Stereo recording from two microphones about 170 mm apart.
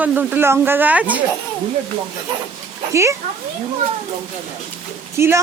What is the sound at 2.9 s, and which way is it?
Speech, 15° right (ahead or behind).